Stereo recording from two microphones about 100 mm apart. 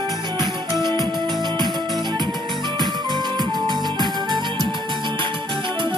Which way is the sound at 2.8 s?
45° right (ahead or behind).